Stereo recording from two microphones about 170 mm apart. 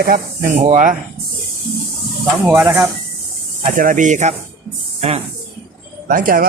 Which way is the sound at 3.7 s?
50° right (ahead or behind).